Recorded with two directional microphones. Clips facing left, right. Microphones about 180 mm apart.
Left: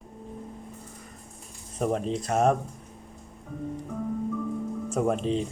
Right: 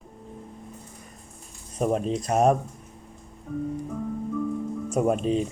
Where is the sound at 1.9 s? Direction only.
20° right (ahead or behind).